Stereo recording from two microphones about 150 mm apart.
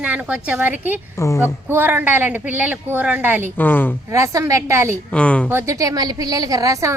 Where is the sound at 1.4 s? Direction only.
15° right (ahead or behind).